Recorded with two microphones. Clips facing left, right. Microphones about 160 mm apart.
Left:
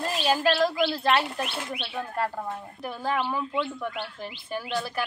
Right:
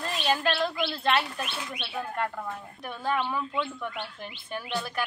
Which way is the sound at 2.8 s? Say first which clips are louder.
Left 1 dB; 5° left (ahead or behind).